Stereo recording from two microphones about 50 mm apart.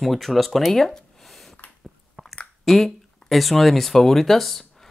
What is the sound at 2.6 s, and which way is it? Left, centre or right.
Speech, centre.